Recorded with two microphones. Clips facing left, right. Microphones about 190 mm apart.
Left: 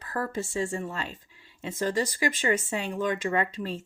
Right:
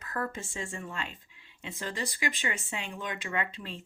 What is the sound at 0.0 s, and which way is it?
Speech, 30° left (ahead or behind).